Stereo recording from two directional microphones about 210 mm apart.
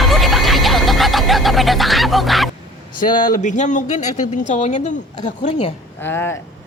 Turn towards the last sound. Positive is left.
turn(degrees=10)  # may be behind; listen again after turning